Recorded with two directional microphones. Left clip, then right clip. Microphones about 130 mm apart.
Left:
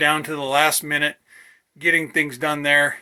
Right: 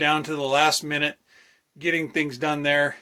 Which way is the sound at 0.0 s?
20° right (ahead or behind).